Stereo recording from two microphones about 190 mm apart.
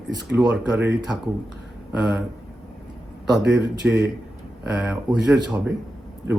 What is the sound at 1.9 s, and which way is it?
Speech, 10° right (ahead or behind).